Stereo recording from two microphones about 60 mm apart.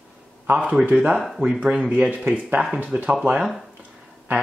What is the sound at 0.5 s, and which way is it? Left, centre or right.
Speech, right.